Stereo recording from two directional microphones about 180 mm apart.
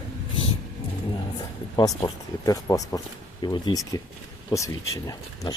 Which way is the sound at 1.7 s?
20° left (ahead or behind).